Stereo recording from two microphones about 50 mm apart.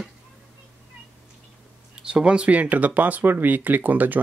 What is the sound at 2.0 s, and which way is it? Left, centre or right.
Speech, centre.